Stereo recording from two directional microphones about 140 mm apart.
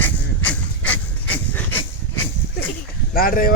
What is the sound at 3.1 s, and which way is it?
Speech, 90° left.